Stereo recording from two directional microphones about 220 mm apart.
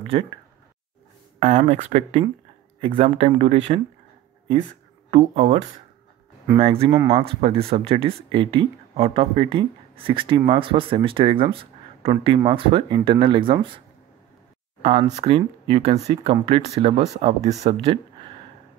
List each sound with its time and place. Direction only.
0.0 s speech: 25° right (ahead or behind)
1.4 s speech: 30° right (ahead or behind)
5.1 s speech: 25° right (ahead or behind)
6.6 s speech: 25° right (ahead or behind)
14.8 s speech: 25° right (ahead or behind)